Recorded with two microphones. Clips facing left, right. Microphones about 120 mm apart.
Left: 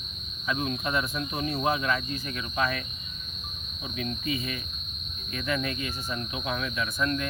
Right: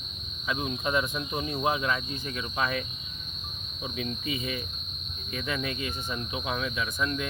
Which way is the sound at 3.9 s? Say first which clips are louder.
Left 2 dB; 20° right (ahead or behind).